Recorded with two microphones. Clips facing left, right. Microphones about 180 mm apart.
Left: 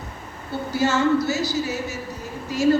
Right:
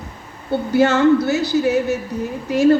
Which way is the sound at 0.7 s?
60° right (ahead or behind).